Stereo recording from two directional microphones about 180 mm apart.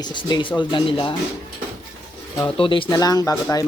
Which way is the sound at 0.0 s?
25° left (ahead or behind).